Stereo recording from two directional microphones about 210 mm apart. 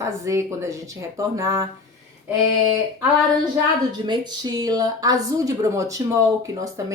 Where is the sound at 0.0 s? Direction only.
15° right (ahead or behind).